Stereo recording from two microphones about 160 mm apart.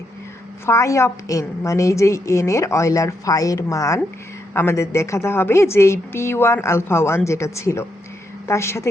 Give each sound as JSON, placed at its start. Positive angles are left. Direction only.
{"t": 0.6, "sound": "a woman's voice", "side_deg": 20}